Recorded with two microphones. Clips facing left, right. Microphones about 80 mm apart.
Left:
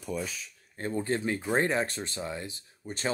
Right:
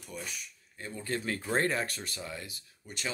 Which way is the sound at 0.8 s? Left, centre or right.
Left.